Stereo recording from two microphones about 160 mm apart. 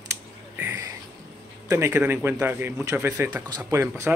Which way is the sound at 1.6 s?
15° right (ahead or behind).